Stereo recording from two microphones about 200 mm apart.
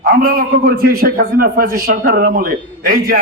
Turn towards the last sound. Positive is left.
turn(degrees=-45)  # may be behind; listen again after turning